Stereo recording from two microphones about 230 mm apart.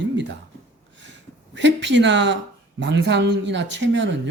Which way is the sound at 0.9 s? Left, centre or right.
Right.